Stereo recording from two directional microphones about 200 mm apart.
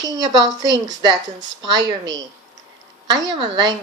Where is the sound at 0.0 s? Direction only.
20° right (ahead or behind).